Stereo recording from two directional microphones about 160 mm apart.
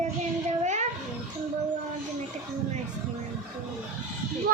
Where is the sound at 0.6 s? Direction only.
45° right (ahead or behind).